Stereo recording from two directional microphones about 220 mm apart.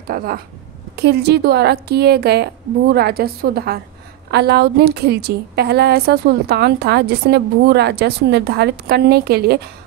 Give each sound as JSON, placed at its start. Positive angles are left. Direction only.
{"t": 0.1, "sound": "a woman's voice", "side_deg": -40}